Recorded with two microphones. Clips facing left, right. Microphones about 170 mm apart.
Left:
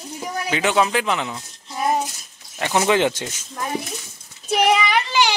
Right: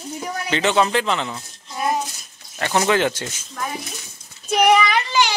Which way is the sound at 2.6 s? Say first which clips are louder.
Left 1 dB; 15° left (ahead or behind).